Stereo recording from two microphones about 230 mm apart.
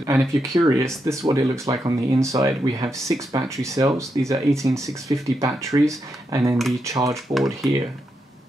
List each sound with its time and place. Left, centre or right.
0.0 s speech: centre